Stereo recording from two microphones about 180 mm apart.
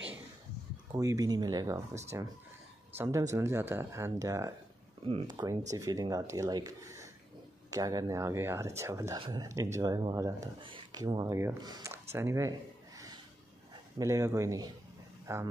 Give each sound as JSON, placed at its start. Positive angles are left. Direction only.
{"t": 0.9, "sound": "speech", "side_deg": -20}